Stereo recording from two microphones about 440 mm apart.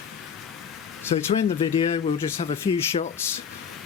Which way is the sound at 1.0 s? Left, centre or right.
Centre.